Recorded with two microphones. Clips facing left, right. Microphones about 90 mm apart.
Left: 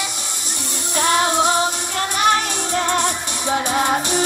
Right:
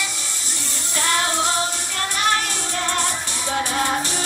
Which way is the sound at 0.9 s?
20° left (ahead or behind).